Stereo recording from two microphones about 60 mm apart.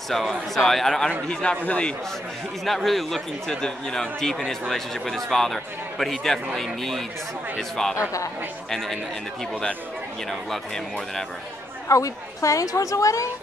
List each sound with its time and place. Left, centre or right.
0.1 s a man's voice: centre
2.6 s a man's voice: centre
7.9 s speech: left
8.6 s a man's voice: centre
11.9 s a woman's voice: left